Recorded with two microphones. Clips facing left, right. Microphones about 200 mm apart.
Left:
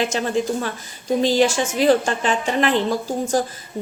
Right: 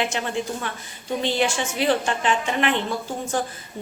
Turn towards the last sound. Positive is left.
turn(degrees=40)  # may be behind; listen again after turning